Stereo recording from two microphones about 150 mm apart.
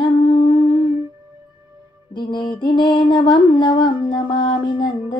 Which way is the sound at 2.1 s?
30° left (ahead or behind).